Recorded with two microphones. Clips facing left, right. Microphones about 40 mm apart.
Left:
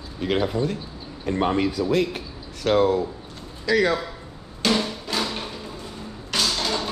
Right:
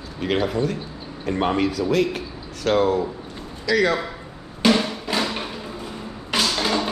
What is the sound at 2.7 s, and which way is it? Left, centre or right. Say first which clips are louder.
Speech: even; right.